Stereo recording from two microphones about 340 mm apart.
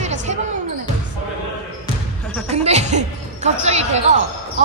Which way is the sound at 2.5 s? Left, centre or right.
Centre.